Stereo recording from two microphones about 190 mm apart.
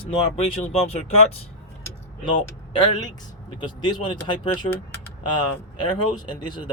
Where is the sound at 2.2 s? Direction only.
25° left (ahead or behind).